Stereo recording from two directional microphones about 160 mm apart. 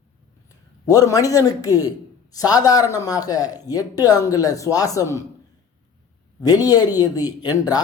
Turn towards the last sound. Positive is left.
turn(degrees=25)  # may be behind; listen again after turning